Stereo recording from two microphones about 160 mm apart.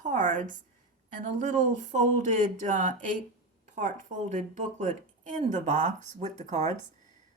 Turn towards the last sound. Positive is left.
turn(degrees=-45)  # may be behind; listen again after turning